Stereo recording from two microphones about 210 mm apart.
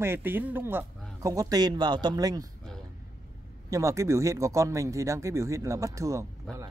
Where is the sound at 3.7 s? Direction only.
15° right (ahead or behind).